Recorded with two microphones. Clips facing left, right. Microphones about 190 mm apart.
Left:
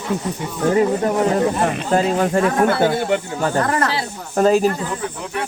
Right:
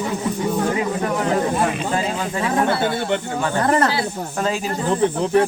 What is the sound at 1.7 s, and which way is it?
Speech, 55° left (ahead or behind).